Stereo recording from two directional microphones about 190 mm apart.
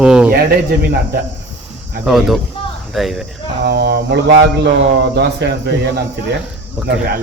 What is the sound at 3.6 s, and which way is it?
Speech, 60° right (ahead or behind).